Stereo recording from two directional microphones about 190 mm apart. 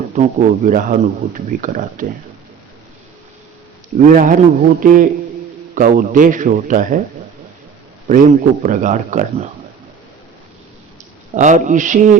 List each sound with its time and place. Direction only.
0.2 s speech: 45° right (ahead or behind)
3.9 s speech: 45° right (ahead or behind)
8.0 s speech: 45° right (ahead or behind)
11.3 s a man's voice: 40° right (ahead or behind)